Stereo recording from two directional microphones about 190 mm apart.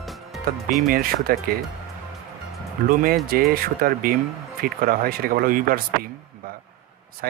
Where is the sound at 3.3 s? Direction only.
50° right (ahead or behind).